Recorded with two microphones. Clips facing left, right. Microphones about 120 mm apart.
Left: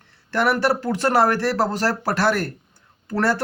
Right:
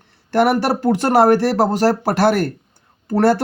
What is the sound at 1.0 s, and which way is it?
Speech, 20° right (ahead or behind).